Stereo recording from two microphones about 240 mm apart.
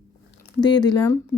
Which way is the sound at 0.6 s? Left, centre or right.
Centre.